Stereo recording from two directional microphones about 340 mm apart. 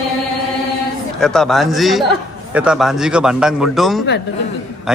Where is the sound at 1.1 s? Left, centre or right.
Centre.